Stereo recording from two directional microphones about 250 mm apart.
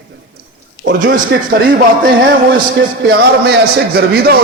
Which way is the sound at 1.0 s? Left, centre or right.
Right.